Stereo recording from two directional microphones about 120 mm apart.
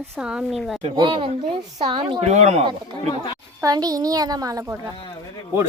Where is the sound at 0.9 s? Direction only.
45° right (ahead or behind).